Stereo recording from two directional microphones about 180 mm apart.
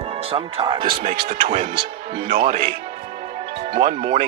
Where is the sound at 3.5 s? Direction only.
30° right (ahead or behind).